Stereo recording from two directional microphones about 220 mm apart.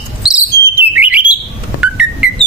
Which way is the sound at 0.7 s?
10° right (ahead or behind).